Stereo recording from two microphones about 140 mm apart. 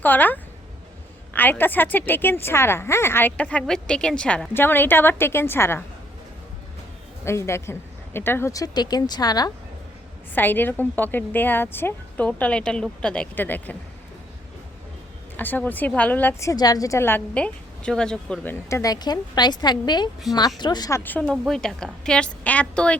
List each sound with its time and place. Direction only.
0.0 s a woman's voice: 10° left (ahead or behind)
1.4 s a woman's voice: 15° left (ahead or behind)
7.3 s a woman's voice: 20° left (ahead or behind)
10.3 s a woman's voice: 15° left (ahead or behind)
15.4 s a woman's voice: 15° left (ahead or behind)
16.5 s a woman's voice: 25° left (ahead or behind); by 18.5 s 5° left (ahead or behind)
18.7 s a woman's voice: 25° left (ahead or behind)
20.3 s speech: centre (ahead or behind)
20.6 s a woman's voice: 30° left (ahead or behind)
21.0 s a woman's voice: 10° left (ahead or behind)